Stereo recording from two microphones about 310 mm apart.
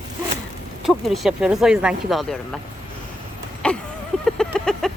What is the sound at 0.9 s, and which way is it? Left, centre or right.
Speech, centre.